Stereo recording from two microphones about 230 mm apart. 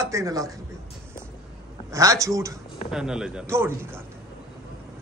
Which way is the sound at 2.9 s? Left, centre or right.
Centre.